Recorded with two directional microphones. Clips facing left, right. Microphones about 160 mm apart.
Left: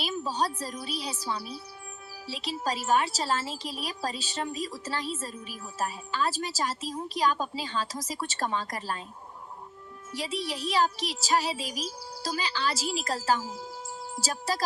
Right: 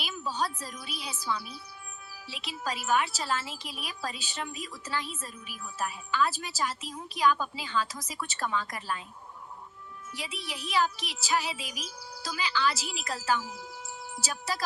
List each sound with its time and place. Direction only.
0.0 s a woman's voice: 30° left (ahead or behind)
10.1 s a woman's voice: 35° left (ahead or behind)